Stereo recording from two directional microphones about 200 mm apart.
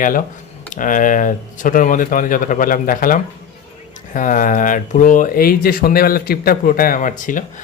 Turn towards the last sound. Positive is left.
turn(degrees=40)  # may be behind; listen again after turning